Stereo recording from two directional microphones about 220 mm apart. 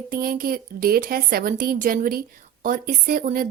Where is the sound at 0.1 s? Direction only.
40° right (ahead or behind).